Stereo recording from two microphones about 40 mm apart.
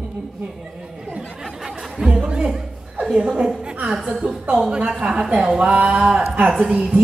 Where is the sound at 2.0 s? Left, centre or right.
Right.